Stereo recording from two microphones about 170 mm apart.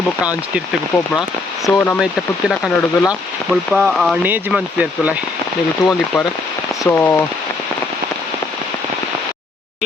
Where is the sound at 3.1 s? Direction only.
5° right (ahead or behind).